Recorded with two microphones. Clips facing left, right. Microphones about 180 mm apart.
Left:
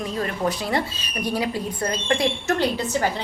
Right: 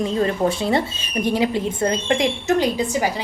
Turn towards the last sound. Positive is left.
turn(degrees=-15)  # may be behind; listen again after turning